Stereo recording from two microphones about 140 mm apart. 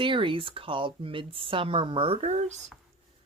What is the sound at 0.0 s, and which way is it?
Speech, 35° right (ahead or behind).